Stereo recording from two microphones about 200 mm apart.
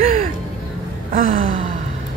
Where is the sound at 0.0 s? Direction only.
40° right (ahead or behind).